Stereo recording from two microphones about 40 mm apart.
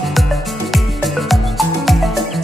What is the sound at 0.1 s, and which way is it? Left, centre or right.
Music, centre.